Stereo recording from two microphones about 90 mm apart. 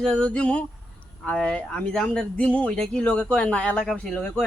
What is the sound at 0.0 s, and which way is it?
Speech, 10° left (ahead or behind).